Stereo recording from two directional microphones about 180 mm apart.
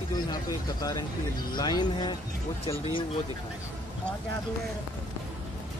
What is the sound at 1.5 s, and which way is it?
Speech, 25° left (ahead or behind).